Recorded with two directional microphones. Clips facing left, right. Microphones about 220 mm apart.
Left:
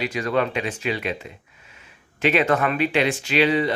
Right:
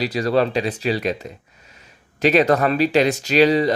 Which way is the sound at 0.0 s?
35° right (ahead or behind).